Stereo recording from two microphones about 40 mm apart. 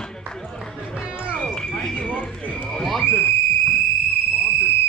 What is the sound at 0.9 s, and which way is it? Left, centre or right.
Music, right.